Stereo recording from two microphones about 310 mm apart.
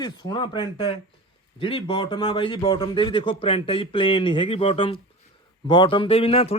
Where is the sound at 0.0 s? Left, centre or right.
Centre.